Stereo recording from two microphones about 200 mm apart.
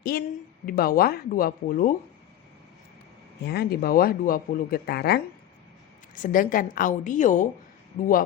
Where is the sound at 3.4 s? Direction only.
55° left (ahead or behind).